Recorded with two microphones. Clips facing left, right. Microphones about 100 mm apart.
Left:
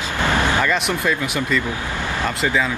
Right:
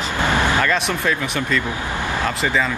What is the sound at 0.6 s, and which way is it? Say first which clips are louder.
Music: even; 5° left (ahead or behind).